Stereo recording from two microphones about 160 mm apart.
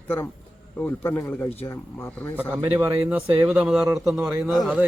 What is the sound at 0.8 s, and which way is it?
Speech, 15° left (ahead or behind).